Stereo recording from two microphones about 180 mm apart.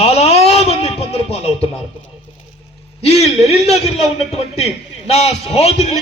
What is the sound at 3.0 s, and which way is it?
A man's voice, 35° left (ahead or behind).